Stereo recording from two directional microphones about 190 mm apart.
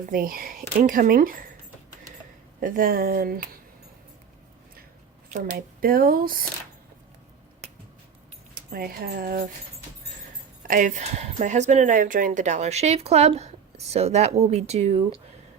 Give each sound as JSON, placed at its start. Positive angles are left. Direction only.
{"t": 0.1, "sound": "speech", "side_deg": -50}
{"t": 2.6, "sound": "speech", "side_deg": -45}
{"t": 5.3, "sound": "speech", "side_deg": -45}
{"t": 8.5, "sound": "speech", "side_deg": -50}
{"t": 10.6, "sound": "speech", "side_deg": -45}